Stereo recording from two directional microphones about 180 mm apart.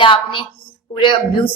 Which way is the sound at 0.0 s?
30° left (ahead or behind).